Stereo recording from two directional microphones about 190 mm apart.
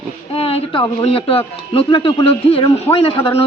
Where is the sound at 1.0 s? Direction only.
30° left (ahead or behind).